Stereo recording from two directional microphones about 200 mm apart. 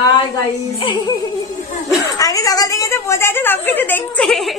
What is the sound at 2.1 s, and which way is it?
A woman's voice, 15° left (ahead or behind).